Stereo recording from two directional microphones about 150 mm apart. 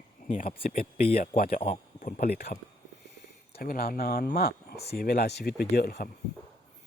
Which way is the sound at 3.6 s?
80° left.